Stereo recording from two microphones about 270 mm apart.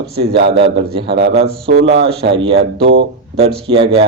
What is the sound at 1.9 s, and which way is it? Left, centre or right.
Speech, right.